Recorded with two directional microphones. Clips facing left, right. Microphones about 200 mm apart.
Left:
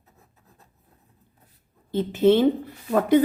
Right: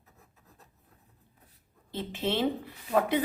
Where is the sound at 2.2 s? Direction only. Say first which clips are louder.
Left 13 dB; 45° left (ahead or behind).